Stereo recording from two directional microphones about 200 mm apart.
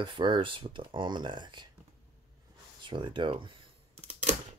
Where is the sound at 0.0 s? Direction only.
25° right (ahead or behind).